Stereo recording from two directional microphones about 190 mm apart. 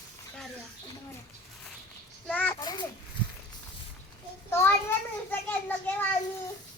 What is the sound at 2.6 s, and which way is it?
Babbling, 20° left (ahead or behind).